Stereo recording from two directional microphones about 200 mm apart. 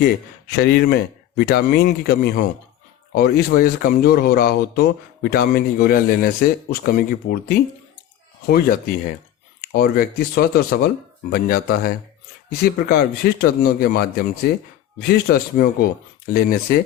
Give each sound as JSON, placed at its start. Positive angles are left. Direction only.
{"t": 0.0, "sound": "a man's voice", "side_deg": 50}
{"t": 9.6, "sound": "a man's voice", "side_deg": 50}